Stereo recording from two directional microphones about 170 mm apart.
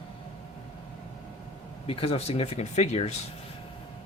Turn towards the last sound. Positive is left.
turn(degrees=40)  # may be behind; listen again after turning